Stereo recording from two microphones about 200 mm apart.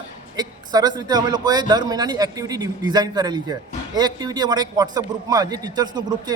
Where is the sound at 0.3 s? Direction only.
20° right (ahead or behind).